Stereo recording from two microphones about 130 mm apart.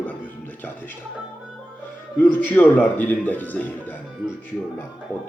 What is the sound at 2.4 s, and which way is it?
Speech, 15° left (ahead or behind).